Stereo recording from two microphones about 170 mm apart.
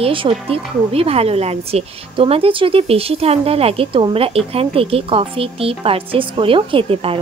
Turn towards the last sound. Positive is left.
turn(degrees=-35)  # may be behind; listen again after turning